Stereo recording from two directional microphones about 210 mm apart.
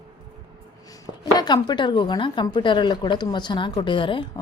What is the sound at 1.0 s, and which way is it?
A woman's voice, 20° left (ahead or behind).